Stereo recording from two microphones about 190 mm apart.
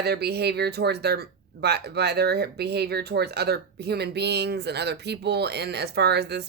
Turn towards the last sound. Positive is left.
turn(degrees=-60)  # may be behind; listen again after turning